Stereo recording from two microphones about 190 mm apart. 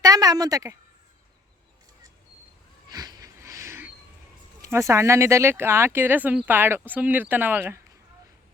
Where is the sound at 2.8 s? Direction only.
20° right (ahead or behind).